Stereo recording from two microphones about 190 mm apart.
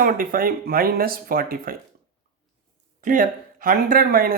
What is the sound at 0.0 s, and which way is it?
Speech, 50° right (ahead or behind).